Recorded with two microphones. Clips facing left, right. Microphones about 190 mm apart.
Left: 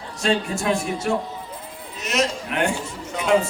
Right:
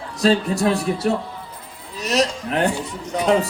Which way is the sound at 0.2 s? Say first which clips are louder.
Right 5 dB; 35° right (ahead or behind).